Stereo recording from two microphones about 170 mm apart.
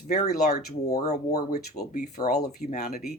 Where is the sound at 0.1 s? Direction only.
70° left (ahead or behind).